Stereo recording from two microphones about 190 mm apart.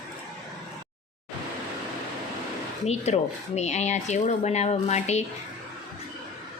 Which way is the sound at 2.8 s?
35° left (ahead or behind).